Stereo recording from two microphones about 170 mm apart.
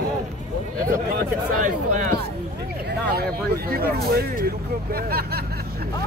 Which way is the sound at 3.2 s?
65° right (ahead or behind).